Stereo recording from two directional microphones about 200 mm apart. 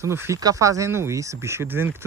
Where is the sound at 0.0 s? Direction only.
15° right (ahead or behind).